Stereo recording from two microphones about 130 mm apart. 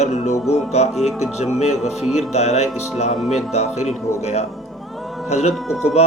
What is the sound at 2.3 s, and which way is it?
Speech, 60° left (ahead or behind).